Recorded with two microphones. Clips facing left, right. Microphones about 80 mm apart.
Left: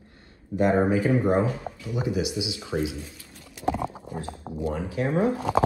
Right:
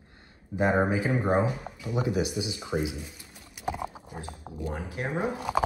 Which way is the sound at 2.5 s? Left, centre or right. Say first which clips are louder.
Left 2 dB; centre.